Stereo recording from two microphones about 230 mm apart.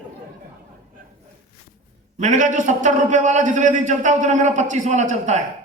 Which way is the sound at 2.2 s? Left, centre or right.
Right.